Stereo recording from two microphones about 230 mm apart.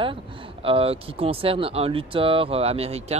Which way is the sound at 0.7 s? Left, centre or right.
Right.